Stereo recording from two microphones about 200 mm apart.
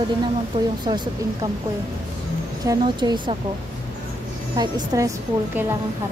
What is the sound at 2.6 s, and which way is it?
Speech, 20° right (ahead or behind).